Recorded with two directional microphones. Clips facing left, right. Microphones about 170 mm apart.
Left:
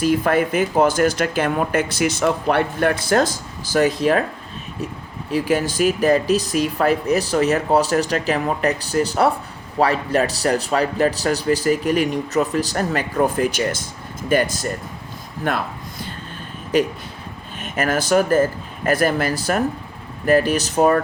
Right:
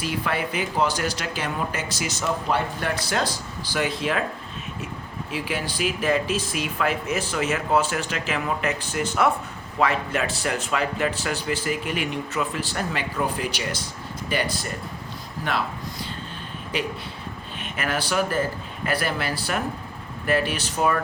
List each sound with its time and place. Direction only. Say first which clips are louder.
0.0 s speech: left 9 dB; 45° left (ahead or behind)
5.3 s speech: left 10 dB; 40° left (ahead or behind)
15.4 s a sound: left 4 dB; 50° left (ahead or behind)
16.7 s speech: left 10 dB; 45° left (ahead or behind)